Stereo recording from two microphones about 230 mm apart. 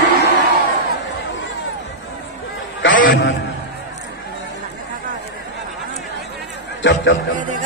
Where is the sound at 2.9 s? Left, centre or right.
Left.